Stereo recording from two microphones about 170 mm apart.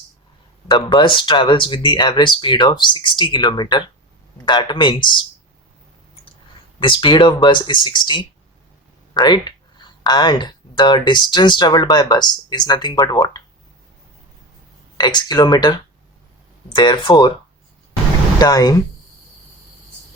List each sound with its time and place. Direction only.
0.7 s speech: 30° left (ahead or behind)
6.7 s speech: 30° left (ahead or behind)
14.9 s speech: 25° left (ahead or behind)
18.3 s speech: 20° left (ahead or behind)